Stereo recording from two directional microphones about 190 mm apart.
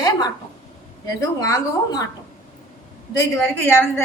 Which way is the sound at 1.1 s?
15° left (ahead or behind).